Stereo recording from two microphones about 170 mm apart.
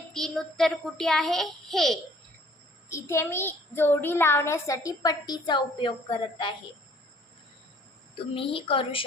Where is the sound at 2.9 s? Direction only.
15° left (ahead or behind).